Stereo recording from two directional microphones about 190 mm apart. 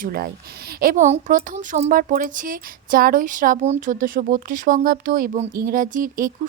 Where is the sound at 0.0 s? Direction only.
55° right (ahead or behind).